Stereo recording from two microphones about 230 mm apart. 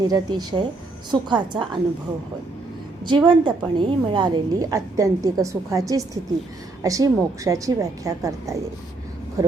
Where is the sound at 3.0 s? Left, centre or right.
Centre.